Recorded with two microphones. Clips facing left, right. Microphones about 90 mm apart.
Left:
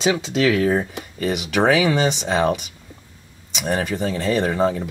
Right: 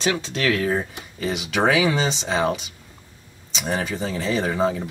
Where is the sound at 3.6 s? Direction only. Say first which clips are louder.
Left 3 dB; centre (ahead or behind).